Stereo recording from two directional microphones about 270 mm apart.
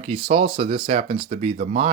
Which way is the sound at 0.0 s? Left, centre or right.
Right.